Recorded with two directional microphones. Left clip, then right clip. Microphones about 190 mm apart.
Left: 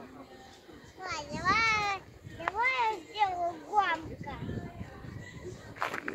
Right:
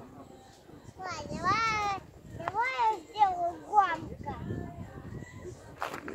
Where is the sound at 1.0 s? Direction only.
40° right (ahead or behind).